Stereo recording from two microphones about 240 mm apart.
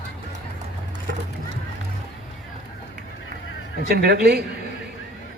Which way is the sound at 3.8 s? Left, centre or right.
Right.